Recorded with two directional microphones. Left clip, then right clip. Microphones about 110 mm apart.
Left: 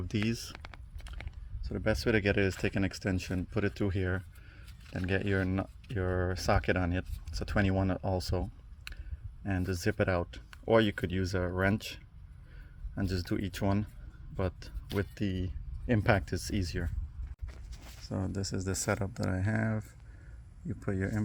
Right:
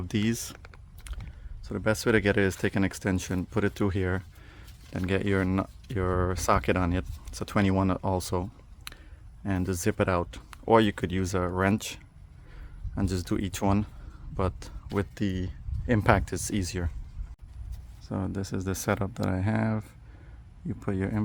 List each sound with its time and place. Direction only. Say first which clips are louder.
0.1 s speech: right 5 dB; 25° right (ahead or behind)
1.6 s speech: right 4 dB; 15° right (ahead or behind)
4.9 s speech: right 4 dB; 15° right (ahead or behind)
18.0 s speech: right 3 dB; 10° right (ahead or behind)